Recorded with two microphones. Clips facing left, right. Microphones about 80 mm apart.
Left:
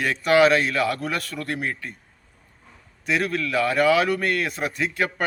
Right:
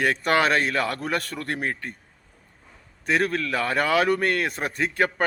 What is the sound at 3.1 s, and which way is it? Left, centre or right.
A man's voice, right.